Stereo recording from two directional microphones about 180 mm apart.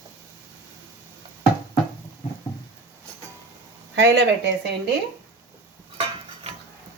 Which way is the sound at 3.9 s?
75° right (ahead or behind).